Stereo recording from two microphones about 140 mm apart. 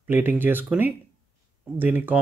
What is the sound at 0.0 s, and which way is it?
Speech, 15° right (ahead or behind).